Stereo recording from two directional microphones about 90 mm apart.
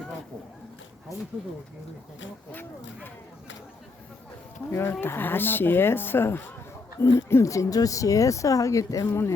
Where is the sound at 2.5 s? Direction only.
25° left (ahead or behind).